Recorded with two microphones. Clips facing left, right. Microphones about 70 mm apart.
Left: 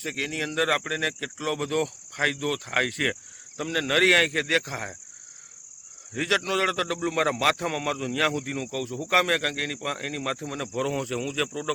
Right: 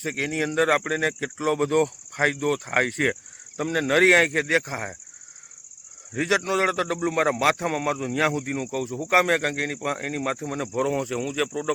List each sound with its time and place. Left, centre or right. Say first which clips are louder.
0.0 s speech: right 4 dB; right
6.1 s speech: right 3 dB; right